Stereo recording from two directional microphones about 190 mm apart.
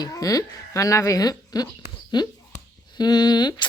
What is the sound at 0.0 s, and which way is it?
Speech, 20° left (ahead or behind).